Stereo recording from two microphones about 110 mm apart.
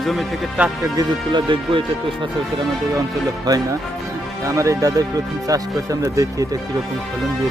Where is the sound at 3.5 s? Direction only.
35° right (ahead or behind).